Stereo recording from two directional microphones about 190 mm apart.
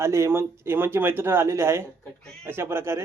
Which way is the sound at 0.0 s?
15° right (ahead or behind).